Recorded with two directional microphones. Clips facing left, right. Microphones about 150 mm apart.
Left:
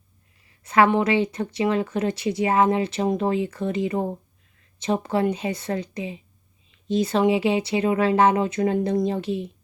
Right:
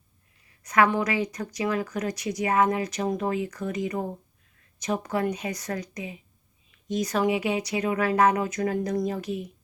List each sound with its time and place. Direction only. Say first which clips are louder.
0.6 s speech: left 4 dB; 25° left (ahead or behind)